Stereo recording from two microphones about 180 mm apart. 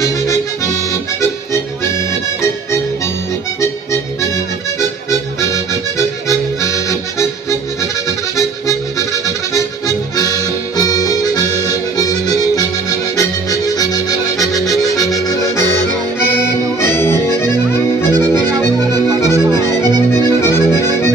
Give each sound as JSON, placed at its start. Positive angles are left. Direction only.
{"t": 0.0, "sound": "music", "side_deg": 15}
{"t": 5.4, "sound": "music", "side_deg": 15}
{"t": 10.1, "sound": "music", "side_deg": 20}
{"t": 11.6, "sound": "accordion", "side_deg": 20}
{"t": 15.7, "sound": "music", "side_deg": 15}
{"t": 16.8, "sound": "accordion", "side_deg": 15}
{"t": 18.8, "sound": "accordion", "side_deg": -20}
{"t": 19.2, "sound": "music", "side_deg": 15}
{"t": 20.2, "sound": "accordion", "side_deg": 15}